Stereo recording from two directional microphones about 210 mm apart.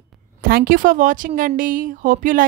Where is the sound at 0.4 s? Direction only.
45° right (ahead or behind).